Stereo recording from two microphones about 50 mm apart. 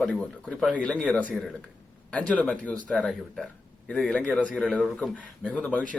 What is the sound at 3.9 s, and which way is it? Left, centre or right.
Speech, left.